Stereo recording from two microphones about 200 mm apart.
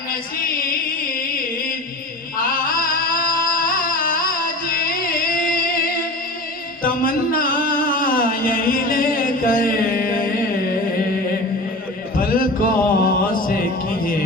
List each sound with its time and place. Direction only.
0.1 s music: 45° left (ahead or behind)
2.4 s music: 45° left (ahead or behind)
6.8 s singing: 45° left (ahead or behind)
12.1 s music: 45° left (ahead or behind)